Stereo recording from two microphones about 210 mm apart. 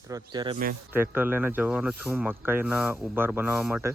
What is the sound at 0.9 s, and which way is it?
Speech, 10° right (ahead or behind).